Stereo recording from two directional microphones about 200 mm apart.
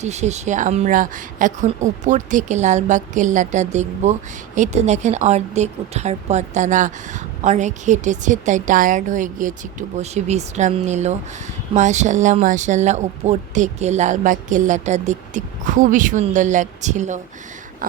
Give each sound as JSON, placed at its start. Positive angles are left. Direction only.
{"t": 0.0, "sound": "speech", "side_deg": -35}